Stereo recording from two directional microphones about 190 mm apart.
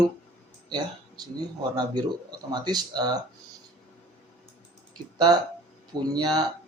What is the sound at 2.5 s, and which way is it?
Speech, 20° right (ahead or behind).